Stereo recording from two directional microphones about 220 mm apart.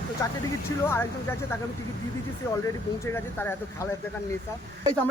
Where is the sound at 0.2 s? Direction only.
15° left (ahead or behind).